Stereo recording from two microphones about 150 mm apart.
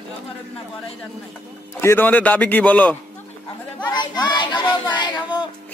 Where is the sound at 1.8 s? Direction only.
15° left (ahead or behind).